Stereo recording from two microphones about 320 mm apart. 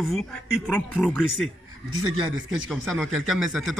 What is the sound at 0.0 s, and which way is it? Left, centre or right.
Speech, centre.